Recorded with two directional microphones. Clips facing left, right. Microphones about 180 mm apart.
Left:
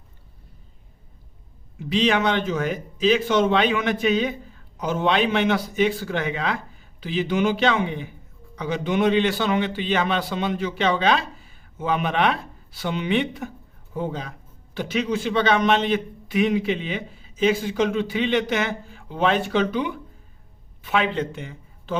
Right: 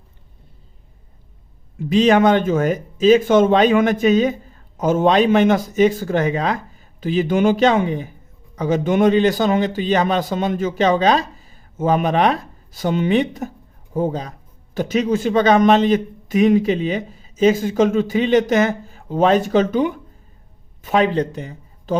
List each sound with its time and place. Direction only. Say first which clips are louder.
1.8 s a man's voice: right 7 dB; 45° right (ahead or behind)